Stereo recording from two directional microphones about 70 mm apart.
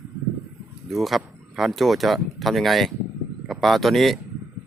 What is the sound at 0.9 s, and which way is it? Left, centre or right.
Speech, centre.